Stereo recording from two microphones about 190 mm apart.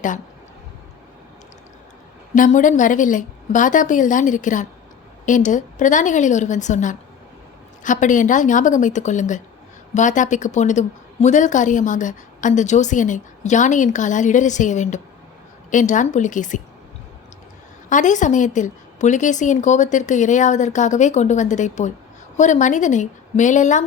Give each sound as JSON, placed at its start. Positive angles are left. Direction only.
{"t": 2.3, "sound": "a woman's voice", "side_deg": 45}
{"t": 17.8, "sound": "a woman's voice", "side_deg": 40}